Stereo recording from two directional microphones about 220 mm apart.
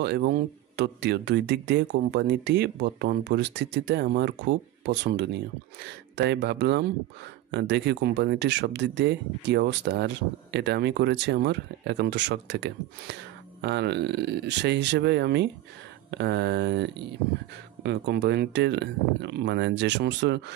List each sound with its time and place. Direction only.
0.0 s speech: 45° right (ahead or behind)
17.8 s speech: 50° right (ahead or behind)